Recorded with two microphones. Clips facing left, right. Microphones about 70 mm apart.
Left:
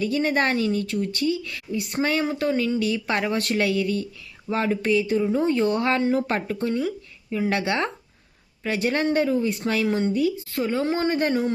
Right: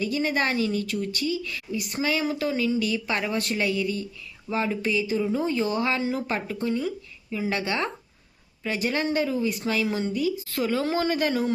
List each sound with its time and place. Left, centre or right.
0.0 s speech: left
2.2 s speech: left
2.5 s speech: left
10.5 s speech: left